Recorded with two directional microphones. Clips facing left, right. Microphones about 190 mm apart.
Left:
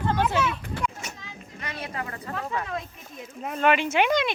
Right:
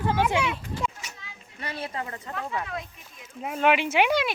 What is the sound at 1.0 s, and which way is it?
Vehicle, 45° left (ahead or behind).